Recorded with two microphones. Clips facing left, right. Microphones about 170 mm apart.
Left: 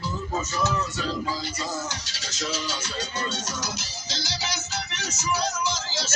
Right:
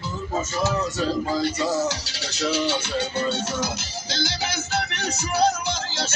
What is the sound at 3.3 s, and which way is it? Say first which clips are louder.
Music: right 6 dB; 55° right (ahead or behind).